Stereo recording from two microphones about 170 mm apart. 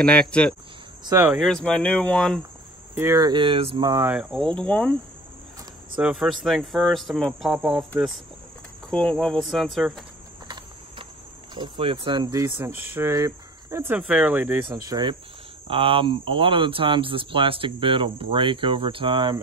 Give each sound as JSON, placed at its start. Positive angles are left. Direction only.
{"t": 0.0, "sound": "speech", "side_deg": 5}
{"t": 1.0, "sound": "speech", "side_deg": -15}
{"t": 1.3, "sound": "speech", "side_deg": 0}
{"t": 2.9, "sound": "speech", "side_deg": -15}
{"t": 4.0, "sound": "speech", "side_deg": -5}
{"t": 5.9, "sound": "speech", "side_deg": -5}
{"t": 11.5, "sound": "speech", "side_deg": -30}
{"t": 14.9, "sound": "speech", "side_deg": -25}